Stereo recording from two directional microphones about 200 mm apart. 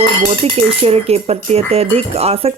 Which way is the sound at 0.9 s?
30° right (ahead or behind).